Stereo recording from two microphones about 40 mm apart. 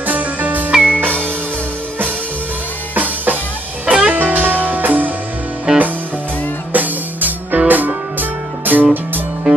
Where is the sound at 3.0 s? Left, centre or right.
Right.